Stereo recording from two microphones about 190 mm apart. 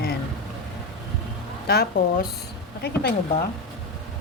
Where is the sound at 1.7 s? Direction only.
55° left (ahead or behind).